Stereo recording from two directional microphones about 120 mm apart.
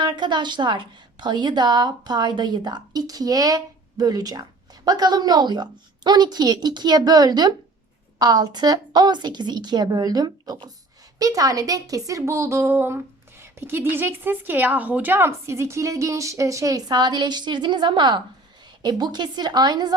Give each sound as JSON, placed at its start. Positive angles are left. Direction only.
{"t": 0.0, "sound": "a woman's voice", "side_deg": -40}